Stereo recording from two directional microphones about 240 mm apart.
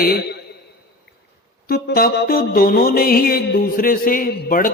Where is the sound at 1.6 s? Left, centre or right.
Left.